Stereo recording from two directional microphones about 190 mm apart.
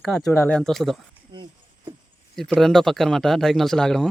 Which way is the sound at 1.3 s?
25° right (ahead or behind).